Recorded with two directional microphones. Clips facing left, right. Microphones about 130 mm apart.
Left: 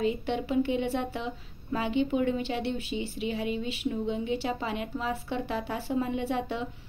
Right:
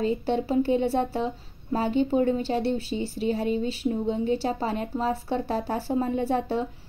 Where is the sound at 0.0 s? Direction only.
35° right (ahead or behind).